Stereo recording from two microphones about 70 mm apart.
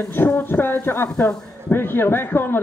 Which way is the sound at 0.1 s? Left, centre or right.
Left.